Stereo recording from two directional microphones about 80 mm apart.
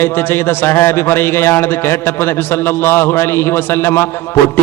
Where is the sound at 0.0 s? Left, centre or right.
Left.